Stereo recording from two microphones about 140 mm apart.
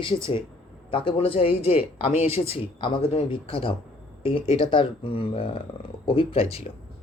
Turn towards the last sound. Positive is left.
turn(degrees=50)  # may be behind; listen again after turning